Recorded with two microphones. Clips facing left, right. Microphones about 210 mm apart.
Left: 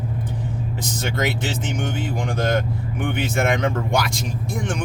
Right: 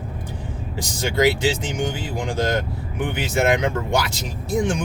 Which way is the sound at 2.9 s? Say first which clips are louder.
Right 1 dB; 5° right (ahead or behind).